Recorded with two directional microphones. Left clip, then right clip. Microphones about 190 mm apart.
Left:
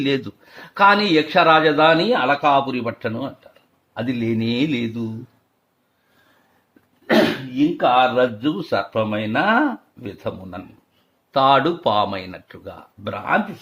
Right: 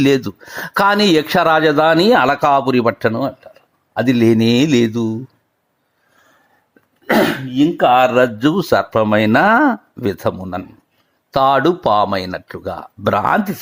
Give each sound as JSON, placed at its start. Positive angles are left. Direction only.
{"t": 0.0, "sound": "speech", "side_deg": -40}
{"t": 7.1, "sound": "speech", "side_deg": -50}